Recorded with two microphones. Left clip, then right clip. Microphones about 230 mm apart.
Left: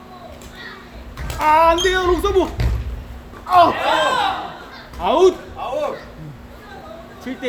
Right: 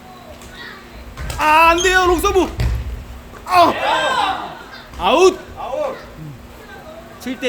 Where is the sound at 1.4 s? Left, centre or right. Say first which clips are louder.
Right 2 dB; right.